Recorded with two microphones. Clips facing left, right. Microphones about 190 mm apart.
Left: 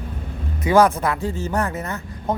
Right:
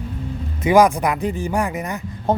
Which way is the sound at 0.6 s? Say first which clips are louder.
Right 2 dB; 15° right (ahead or behind).